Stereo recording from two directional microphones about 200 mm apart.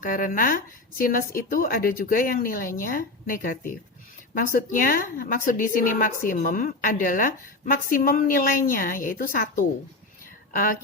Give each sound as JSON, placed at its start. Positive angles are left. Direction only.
{"t": 0.0, "sound": "a woman's voice", "side_deg": 45}